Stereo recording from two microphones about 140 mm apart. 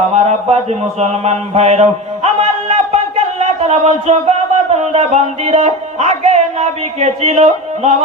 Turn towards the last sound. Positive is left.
turn(degrees=-50)  # may be behind; listen again after turning